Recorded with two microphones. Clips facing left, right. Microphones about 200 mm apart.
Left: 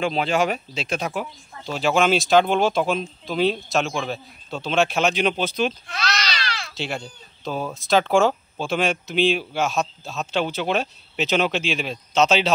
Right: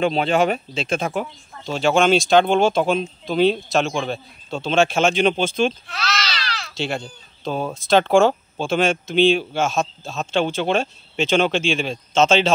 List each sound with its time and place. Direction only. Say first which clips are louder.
0.0 s a man's voice: right 3 dB; centre (ahead or behind)
5.9 s speech: right 1 dB; 15° left (ahead or behind)
6.7 s a sound: right 5 dB; centre (ahead or behind)
7.7 s a man's voice: right 3 dB; centre (ahead or behind)